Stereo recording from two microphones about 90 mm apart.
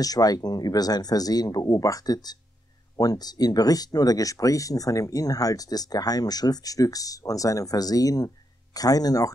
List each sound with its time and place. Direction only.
0.0 s speech: 45° left (ahead or behind)